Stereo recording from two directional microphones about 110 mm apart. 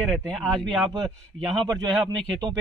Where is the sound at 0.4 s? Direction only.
5° left (ahead or behind).